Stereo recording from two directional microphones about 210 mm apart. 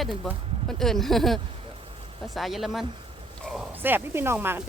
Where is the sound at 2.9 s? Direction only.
25° right (ahead or behind).